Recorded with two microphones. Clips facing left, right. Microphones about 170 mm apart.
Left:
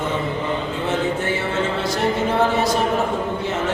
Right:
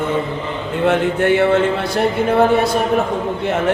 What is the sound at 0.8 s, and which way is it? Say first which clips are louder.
Speech: right 8 dB; 65° right (ahead or behind).